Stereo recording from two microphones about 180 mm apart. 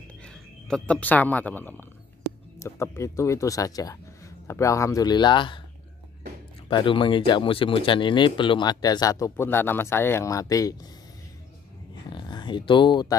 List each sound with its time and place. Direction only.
0.2 s speech: 5° left (ahead or behind); by 5.6 s 25° left (ahead or behind)
6.7 s speech: 30° left (ahead or behind)
12.1 s speech: 25° left (ahead or behind)